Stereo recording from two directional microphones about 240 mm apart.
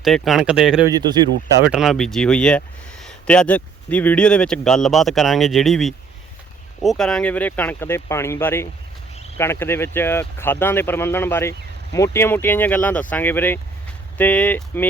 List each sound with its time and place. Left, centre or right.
0.0 s speech: centre
0.9 s a man's voice: centre
1.6 s speech: centre